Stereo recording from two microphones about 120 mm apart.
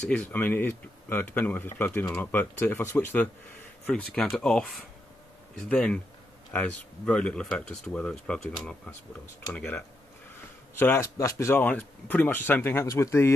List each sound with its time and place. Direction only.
0.1 s speech: 15° left (ahead or behind)